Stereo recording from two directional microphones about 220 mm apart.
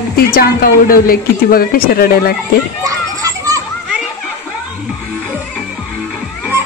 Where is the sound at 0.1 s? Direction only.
40° left (ahead or behind).